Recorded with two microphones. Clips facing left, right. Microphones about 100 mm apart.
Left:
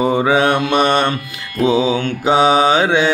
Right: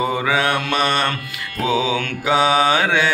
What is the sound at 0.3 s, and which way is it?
Mantra, 25° left (ahead or behind).